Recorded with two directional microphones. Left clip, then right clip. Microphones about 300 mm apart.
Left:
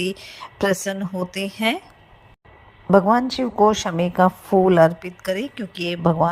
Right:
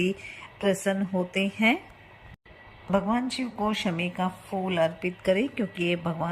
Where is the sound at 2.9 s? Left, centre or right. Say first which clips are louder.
Left 11 dB; left.